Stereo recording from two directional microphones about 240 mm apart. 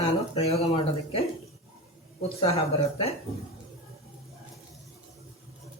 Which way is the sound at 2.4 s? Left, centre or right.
Left.